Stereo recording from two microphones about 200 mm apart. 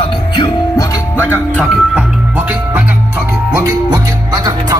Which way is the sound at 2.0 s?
5° right (ahead or behind).